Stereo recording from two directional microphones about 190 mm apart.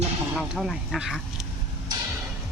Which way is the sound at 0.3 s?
Centre (ahead or behind).